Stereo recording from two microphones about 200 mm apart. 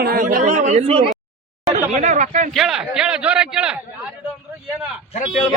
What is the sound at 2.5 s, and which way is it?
A man's voice, centre (ahead or behind).